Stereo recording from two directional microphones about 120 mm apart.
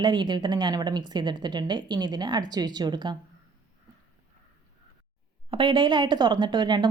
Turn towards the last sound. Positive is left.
turn(degrees=-40)  # may be behind; listen again after turning